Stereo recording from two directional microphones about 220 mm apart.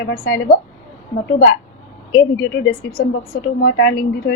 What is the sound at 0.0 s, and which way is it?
A woman's voice, 50° left (ahead or behind).